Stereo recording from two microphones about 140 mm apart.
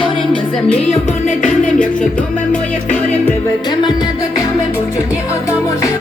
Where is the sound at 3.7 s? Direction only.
30° left (ahead or behind).